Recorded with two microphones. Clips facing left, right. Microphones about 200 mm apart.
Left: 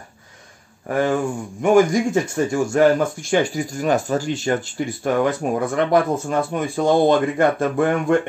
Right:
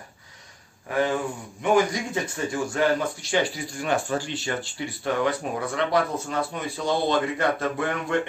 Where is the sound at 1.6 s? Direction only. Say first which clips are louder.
Left 7 dB; 45° left (ahead or behind).